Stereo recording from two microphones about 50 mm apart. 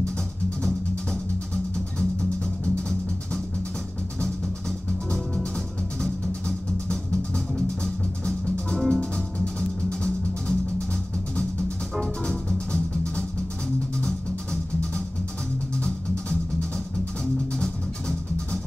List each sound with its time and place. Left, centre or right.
1.5 s music: centre
4.6 s music: centre
8.7 s music: centre
9.0 s music: centre
12.0 s music: centre